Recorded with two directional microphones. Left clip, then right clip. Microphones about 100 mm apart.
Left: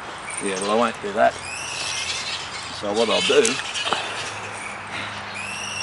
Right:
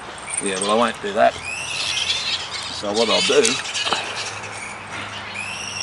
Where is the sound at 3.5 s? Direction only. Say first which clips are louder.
Right 2 dB; 20° right (ahead or behind).